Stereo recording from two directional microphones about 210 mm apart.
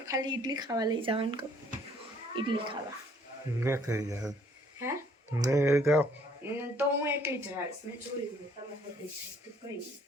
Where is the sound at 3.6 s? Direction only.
10° right (ahead or behind).